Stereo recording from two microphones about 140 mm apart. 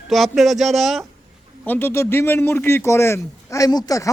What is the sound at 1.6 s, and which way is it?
A man's voice, 15° left (ahead or behind).